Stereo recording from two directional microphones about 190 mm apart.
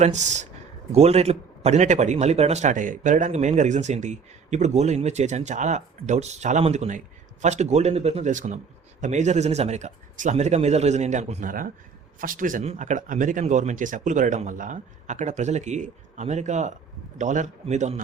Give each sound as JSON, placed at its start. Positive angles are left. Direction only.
{"t": 0.0, "sound": "speech", "side_deg": -40}